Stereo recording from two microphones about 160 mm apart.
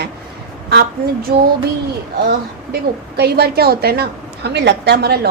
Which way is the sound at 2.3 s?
90° right.